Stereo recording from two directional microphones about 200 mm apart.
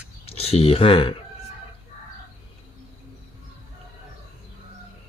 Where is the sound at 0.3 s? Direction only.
30° left (ahead or behind).